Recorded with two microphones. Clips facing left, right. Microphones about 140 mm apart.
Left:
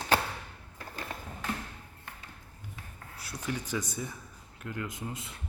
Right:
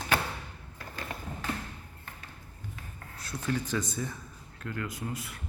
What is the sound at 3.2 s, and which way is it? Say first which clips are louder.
Speech: right 4 dB; 10° left (ahead or behind).